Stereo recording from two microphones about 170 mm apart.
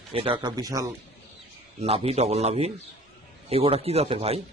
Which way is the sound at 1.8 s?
35° right (ahead or behind).